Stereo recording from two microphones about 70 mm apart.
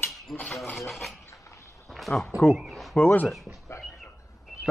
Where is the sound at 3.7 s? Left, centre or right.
Left.